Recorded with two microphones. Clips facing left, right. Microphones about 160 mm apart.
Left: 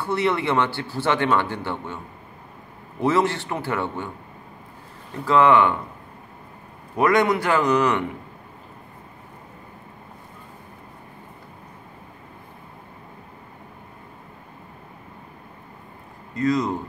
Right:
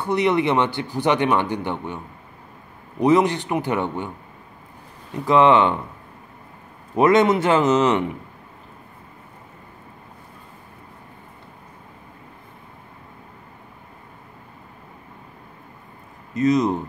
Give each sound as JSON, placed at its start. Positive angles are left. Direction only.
{"t": 0.0, "sound": "speech", "side_deg": -20}
{"t": 3.0, "sound": "speech", "side_deg": -15}
{"t": 5.1, "sound": "speech", "side_deg": -20}
{"t": 7.0, "sound": "speech", "side_deg": -20}
{"t": 16.3, "sound": "speech", "side_deg": -20}